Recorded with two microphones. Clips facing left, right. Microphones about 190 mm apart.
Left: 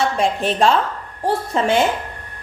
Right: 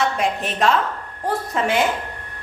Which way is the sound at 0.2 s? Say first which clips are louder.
Left 4 dB; 30° left (ahead or behind).